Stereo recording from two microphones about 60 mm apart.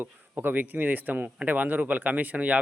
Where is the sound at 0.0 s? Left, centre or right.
Right.